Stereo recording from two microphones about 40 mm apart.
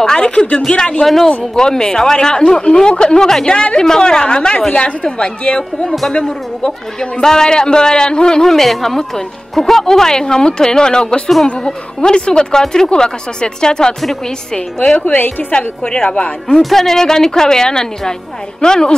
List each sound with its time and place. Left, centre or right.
0.0 s speech: centre
1.0 s a man's voice: centre
1.5 s a man's voice: centre
6.6 s a man's voice: centre
15.0 s a woman's voice: left
15.5 s speech: left
16.6 s a man's voice: centre